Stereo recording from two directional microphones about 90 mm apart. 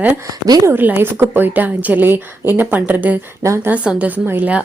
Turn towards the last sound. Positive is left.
turn(degrees=-20)  # may be behind; listen again after turning